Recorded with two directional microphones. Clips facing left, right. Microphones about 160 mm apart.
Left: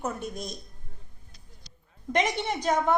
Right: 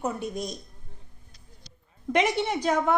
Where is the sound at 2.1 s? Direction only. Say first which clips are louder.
Right 3 dB; 5° right (ahead or behind).